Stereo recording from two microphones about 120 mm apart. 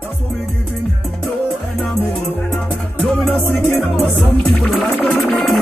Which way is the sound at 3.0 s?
5° left (ahead or behind).